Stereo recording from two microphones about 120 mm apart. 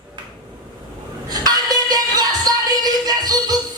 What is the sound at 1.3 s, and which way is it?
Music, 35° right (ahead or behind).